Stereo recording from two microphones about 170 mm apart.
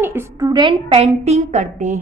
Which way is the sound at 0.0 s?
15° right (ahead or behind).